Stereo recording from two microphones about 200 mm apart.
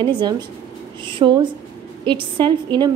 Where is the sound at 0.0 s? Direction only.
20° right (ahead or behind).